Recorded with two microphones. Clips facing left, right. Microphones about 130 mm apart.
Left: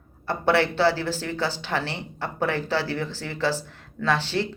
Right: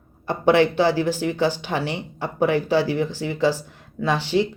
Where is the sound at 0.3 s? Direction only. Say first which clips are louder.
Right 5 dB; 15° right (ahead or behind).